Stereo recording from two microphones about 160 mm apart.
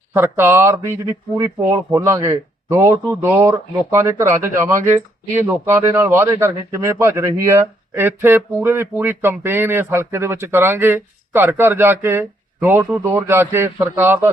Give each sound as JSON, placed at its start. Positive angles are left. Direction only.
{"t": 0.1, "sound": "a man's voice", "side_deg": -15}